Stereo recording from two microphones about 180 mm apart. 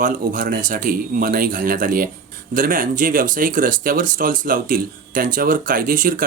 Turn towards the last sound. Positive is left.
turn(degrees=-50)  # may be behind; listen again after turning